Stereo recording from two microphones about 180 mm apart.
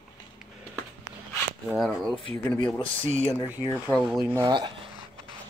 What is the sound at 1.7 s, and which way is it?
Speech, centre (ahead or behind).